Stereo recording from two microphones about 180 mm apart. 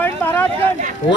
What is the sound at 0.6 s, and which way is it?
Speech, 45° right (ahead or behind).